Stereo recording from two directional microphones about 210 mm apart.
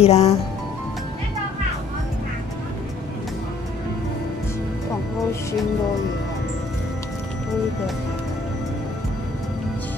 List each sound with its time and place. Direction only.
0.0 s speech: 30° left (ahead or behind)